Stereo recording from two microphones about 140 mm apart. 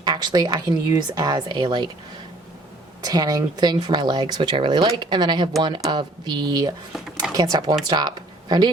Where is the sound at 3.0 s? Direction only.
30° right (ahead or behind).